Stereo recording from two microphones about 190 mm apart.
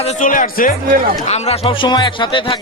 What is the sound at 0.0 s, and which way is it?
Speech, 45° left (ahead or behind).